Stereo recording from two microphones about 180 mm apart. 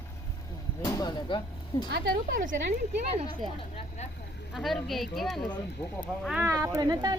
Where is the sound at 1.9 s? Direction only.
55° right (ahead or behind).